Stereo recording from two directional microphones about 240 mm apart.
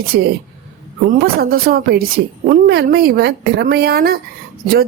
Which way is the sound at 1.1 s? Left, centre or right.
Right.